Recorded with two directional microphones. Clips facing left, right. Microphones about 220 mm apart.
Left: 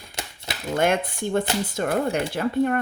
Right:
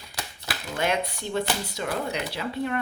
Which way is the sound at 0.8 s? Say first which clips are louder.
Left 5 dB; 50° left (ahead or behind).